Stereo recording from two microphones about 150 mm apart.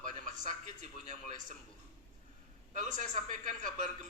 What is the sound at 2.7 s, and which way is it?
Speech, 55° right (ahead or behind).